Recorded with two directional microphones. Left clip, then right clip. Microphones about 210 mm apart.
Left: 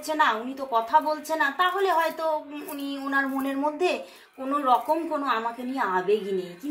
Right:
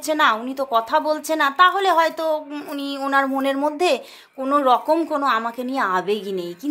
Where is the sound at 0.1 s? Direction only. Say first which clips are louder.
Right 5 dB; 50° right (ahead or behind).